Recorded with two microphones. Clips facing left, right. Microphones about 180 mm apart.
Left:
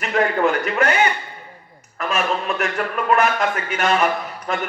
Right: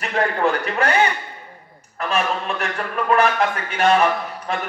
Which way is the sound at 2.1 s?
35° right (ahead or behind).